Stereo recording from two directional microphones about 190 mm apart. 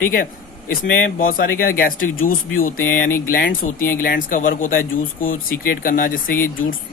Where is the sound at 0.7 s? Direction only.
45° left (ahead or behind).